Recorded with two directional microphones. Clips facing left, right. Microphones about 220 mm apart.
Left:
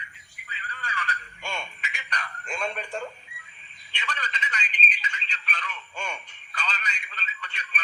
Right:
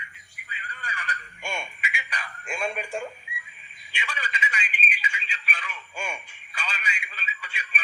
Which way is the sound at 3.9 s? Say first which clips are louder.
Even; 10° right (ahead or behind).